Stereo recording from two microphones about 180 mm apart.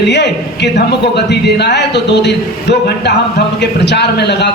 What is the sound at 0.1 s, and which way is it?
A man's voice, 70° left (ahead or behind).